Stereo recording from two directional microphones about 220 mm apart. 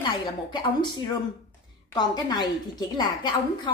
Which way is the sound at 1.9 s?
20° left (ahead or behind).